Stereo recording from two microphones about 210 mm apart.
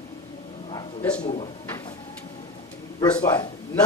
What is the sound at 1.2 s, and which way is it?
Speech, 30° left (ahead or behind).